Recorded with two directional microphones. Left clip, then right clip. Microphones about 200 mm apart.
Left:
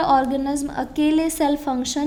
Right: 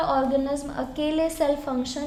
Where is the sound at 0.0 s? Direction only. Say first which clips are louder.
Left 4 dB; 35° left (ahead or behind).